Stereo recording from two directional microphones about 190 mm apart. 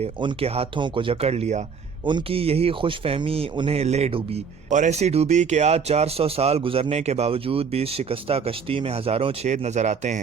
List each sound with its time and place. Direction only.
0.0 s speech: 30° right (ahead or behind)